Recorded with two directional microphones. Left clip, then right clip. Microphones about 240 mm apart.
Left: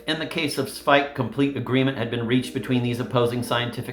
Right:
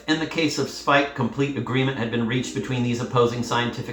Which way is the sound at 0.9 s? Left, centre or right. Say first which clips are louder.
Left 1 dB; left.